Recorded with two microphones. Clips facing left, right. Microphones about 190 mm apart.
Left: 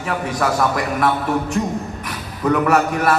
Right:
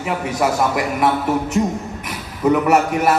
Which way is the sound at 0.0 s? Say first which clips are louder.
Right 1 dB; 20° right (ahead or behind).